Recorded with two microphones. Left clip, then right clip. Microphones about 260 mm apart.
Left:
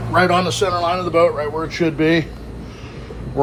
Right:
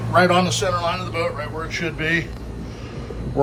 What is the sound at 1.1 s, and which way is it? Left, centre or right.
A man's voice, left.